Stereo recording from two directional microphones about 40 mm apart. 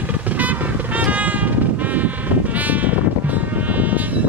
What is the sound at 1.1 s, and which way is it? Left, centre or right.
Vehicle, right.